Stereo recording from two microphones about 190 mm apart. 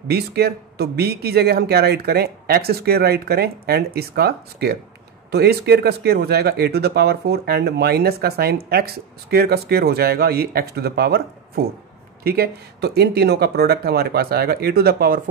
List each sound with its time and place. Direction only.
0.1 s speech: 55° right (ahead or behind)